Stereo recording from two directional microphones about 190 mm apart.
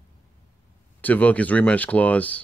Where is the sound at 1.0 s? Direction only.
10° left (ahead or behind).